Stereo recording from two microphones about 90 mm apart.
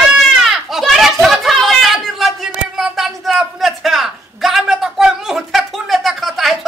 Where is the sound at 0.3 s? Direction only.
5° right (ahead or behind).